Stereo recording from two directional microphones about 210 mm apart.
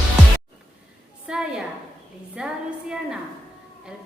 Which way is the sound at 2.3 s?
5° right (ahead or behind).